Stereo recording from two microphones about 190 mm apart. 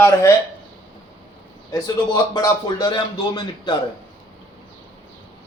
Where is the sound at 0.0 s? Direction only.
15° left (ahead or behind).